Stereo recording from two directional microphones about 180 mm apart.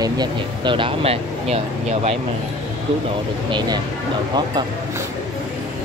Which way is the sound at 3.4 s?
25° right (ahead or behind).